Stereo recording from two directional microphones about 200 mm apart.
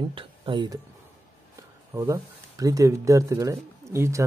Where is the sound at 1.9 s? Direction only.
15° right (ahead or behind).